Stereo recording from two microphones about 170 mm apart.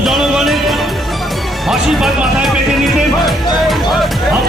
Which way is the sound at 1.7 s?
Centre (ahead or behind).